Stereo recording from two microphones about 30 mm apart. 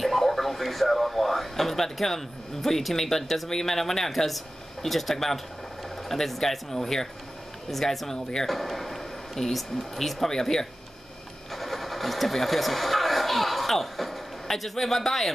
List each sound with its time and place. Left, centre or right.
0.0 s speech: centre
11.5 s speech: centre